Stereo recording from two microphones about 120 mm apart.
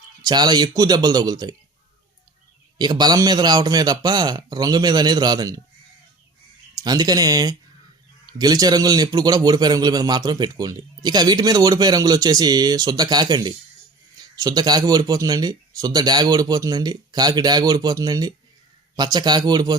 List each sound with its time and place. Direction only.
0.3 s a man's voice: 35° right (ahead or behind)
2.7 s a man's voice: 35° right (ahead or behind)
6.8 s a man's voice: 35° right (ahead or behind)